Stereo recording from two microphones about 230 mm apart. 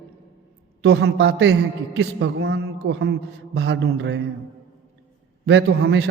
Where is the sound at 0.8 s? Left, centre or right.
Right.